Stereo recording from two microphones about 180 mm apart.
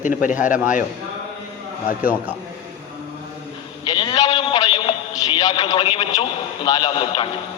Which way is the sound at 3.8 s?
25° left (ahead or behind).